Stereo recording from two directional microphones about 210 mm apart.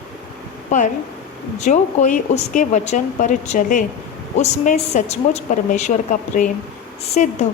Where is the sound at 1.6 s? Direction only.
35° left (ahead or behind).